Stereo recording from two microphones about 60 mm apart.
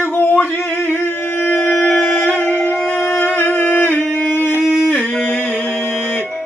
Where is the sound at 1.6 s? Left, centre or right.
Centre.